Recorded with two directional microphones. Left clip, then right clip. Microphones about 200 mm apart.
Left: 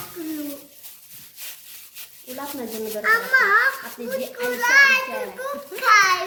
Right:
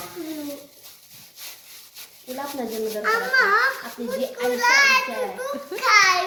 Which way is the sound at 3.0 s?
10° left (ahead or behind).